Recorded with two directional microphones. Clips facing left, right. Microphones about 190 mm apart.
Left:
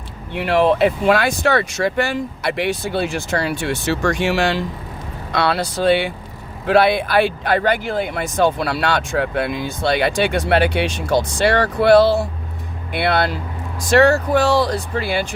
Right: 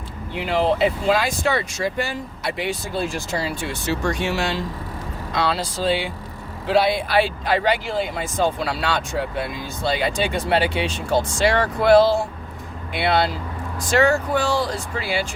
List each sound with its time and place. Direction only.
0.3 s speech: 65° left (ahead or behind); by 4.6 s 90° left
5.3 s speech: 65° left (ahead or behind)
14.1 s speech: 70° left (ahead or behind)